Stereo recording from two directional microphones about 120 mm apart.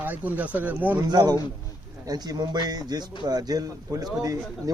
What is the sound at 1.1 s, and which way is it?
A man's voice, 35° right (ahead or behind).